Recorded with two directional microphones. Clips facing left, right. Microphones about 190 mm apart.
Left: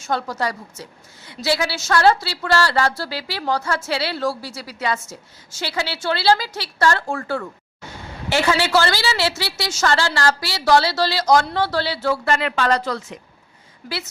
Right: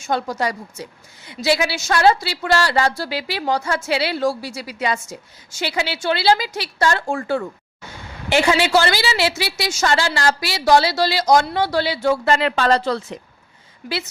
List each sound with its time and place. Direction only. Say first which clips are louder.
0.0 s a woman's voice: right 2 dB; 15° right (ahead or behind)
12.3 s speech: right 1 dB; 30° right (ahead or behind)